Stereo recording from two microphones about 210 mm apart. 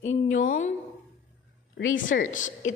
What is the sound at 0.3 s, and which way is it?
Speech, 40° left (ahead or behind).